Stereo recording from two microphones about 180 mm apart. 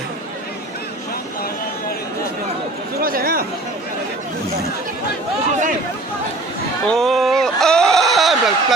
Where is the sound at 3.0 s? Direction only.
55° right (ahead or behind).